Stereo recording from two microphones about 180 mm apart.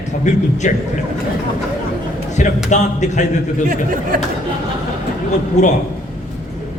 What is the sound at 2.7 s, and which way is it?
Speech, 40° left (ahead or behind).